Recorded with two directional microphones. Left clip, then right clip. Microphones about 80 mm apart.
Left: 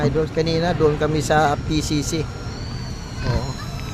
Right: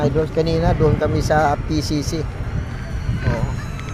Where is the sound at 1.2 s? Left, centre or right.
Left.